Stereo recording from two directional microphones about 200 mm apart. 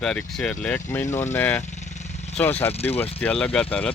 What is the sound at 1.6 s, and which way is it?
Vehicle, 35° left (ahead or behind).